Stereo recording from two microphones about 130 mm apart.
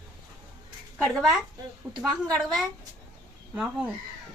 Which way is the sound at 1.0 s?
5° left (ahead or behind).